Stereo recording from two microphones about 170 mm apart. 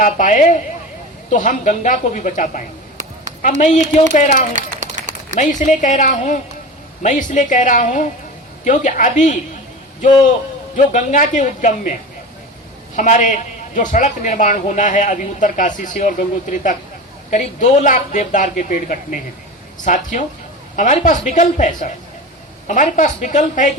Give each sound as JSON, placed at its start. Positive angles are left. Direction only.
{"t": 0.0, "sound": "a man's voice", "side_deg": 50}
{"t": 4.5, "sound": "a sound", "side_deg": -45}
{"t": 5.4, "sound": "a man's voice", "side_deg": 45}
{"t": 10.8, "sound": "a man's voice", "side_deg": 45}
{"t": 13.0, "sound": "a man's voice", "side_deg": 50}